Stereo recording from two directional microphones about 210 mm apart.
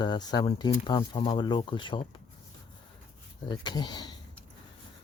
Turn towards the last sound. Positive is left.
turn(degrees=20)  # may be behind; listen again after turning